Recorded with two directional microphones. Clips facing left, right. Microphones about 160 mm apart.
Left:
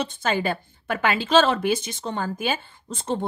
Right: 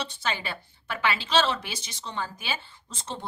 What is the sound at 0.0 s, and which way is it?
A woman's voice, 50° left (ahead or behind).